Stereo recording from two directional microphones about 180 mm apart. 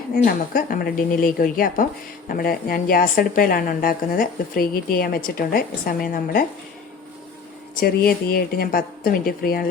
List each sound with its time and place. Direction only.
0.3 s a woman's voice: 55° left (ahead or behind)
7.8 s speech: 55° left (ahead or behind)